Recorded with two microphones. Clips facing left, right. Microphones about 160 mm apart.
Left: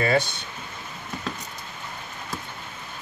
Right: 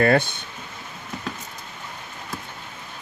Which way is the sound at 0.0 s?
55° right (ahead or behind).